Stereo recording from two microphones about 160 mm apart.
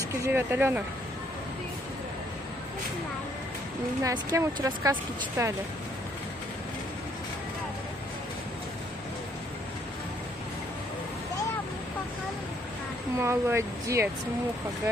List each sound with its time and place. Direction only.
0.2 s speech: 10° right (ahead or behind)
4.0 s speech: 20° right (ahead or behind)
13.2 s speech: 15° right (ahead or behind)